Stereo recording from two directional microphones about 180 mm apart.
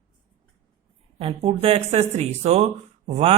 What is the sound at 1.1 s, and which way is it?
Speech, 35° right (ahead or behind).